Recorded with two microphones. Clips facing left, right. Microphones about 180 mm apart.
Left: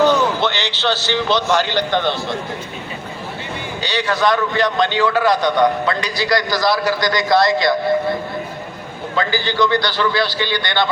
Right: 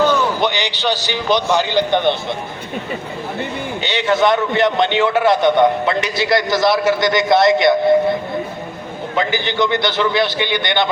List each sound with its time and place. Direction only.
0.3 s a man's voice: 15° right (ahead or behind)
3.8 s a man's voice: 25° right (ahead or behind)
9.1 s a man's voice: 20° right (ahead or behind)